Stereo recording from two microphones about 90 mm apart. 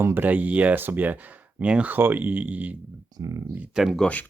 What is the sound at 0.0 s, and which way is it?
Speech, 20° right (ahead or behind).